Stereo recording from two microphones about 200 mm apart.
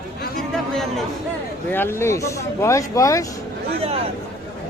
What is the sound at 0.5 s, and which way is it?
Chatter, centre (ahead or behind).